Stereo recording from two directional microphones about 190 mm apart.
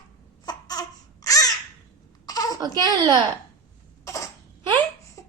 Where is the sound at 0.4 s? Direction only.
20° left (ahead or behind).